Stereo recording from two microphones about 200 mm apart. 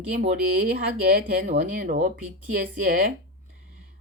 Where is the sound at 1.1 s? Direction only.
45° right (ahead or behind).